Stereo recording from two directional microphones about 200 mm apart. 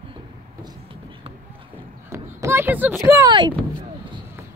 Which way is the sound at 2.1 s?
15° right (ahead or behind).